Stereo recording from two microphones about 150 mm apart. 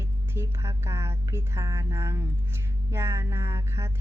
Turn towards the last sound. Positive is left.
turn(degrees=-15)  # may be behind; listen again after turning